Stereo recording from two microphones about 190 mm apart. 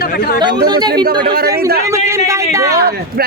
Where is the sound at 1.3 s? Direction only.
55° right (ahead or behind).